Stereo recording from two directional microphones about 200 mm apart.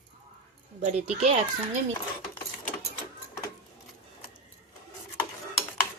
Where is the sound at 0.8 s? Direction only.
35° right (ahead or behind).